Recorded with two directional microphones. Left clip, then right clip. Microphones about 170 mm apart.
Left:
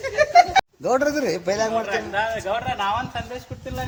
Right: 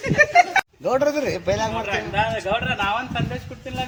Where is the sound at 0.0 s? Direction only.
80° left.